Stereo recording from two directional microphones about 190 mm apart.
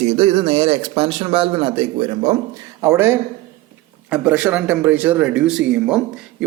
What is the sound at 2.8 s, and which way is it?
Speech, 15° right (ahead or behind).